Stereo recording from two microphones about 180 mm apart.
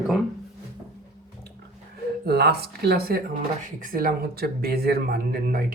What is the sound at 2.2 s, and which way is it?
Speech, 65° right (ahead or behind).